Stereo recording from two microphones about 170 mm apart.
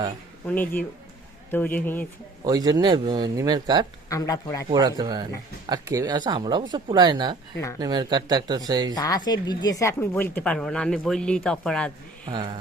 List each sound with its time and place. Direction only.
0.4 s speech: 10° left (ahead or behind)
2.4 s speech: 20° right (ahead or behind)
4.1 s speech: 20° left (ahead or behind)
4.7 s speech: 25° right (ahead or behind)
9.0 s speech: 25° left (ahead or behind); by 11.9 s 5° left (ahead or behind)